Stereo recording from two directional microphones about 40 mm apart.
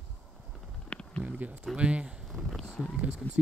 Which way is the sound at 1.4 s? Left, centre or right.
Right.